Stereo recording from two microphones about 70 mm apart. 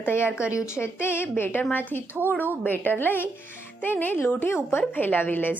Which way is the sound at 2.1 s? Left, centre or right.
Right.